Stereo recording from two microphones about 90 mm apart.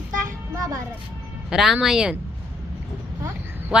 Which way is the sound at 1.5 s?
5° right (ahead or behind).